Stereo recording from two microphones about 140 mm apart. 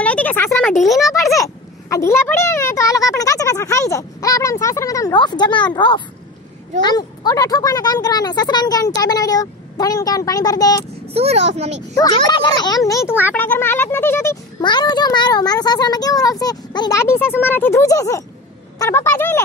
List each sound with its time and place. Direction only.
0.0 s a sound: 10° left (ahead or behind)
0.7 s speech: centre (ahead or behind)
1.1 s a sound: 20° left (ahead or behind)
5.8 s a child's voice: 35° left (ahead or behind)
11.1 s a child's voice: 45° right (ahead or behind)
12.3 s speech: 30° left (ahead or behind)
13.3 s speech: 10° left (ahead or behind)
14.6 s speech: 30° left (ahead or behind)
17.0 s speech: 15° left (ahead or behind)